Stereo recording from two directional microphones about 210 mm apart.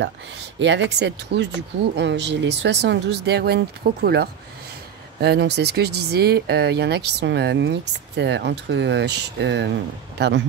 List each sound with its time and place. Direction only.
0.6 s speech: 60° right (ahead or behind)